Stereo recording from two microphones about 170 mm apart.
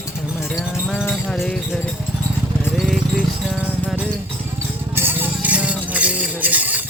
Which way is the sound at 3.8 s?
10° right (ahead or behind).